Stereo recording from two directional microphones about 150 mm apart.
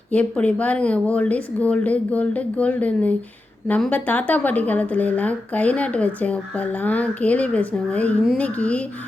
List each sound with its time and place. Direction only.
0.1 s speech: 10° left (ahead or behind)